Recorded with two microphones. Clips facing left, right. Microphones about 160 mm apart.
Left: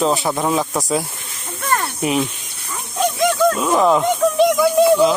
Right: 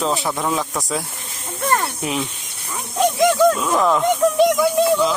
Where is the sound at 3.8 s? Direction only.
10° left (ahead or behind).